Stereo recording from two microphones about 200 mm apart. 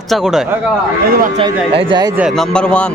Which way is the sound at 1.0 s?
45° right (ahead or behind).